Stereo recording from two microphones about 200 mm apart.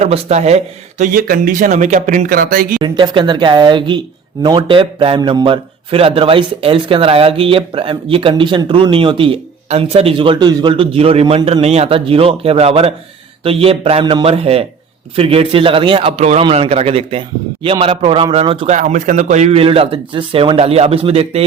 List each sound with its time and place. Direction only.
0.0 s a man's voice: 35° right (ahead or behind)
2.8 s a man's voice: 25° right (ahead or behind)